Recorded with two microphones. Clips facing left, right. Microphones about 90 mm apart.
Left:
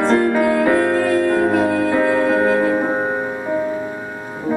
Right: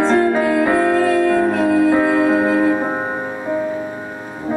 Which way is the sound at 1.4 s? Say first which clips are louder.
Right 1 dB; 5° left (ahead or behind).